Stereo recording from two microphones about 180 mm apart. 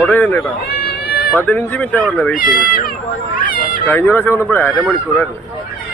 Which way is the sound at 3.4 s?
50° left (ahead or behind).